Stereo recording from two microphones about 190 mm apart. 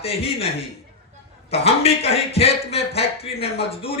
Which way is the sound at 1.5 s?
30° left (ahead or behind).